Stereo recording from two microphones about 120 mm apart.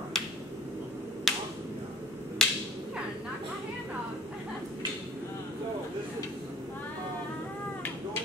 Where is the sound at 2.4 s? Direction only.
5° left (ahead or behind).